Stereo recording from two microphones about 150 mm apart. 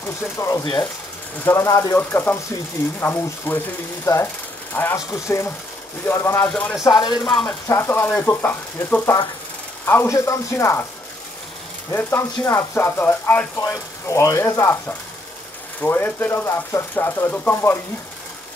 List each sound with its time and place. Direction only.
0.0 s speech: 20° left (ahead or behind)
6.8 s speech: 30° left (ahead or behind)
7.4 s speech: 15° left (ahead or behind)
11.9 s speech: 15° left (ahead or behind)